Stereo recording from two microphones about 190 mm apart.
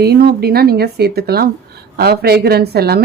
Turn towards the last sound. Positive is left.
turn(degrees=-55)  # may be behind; listen again after turning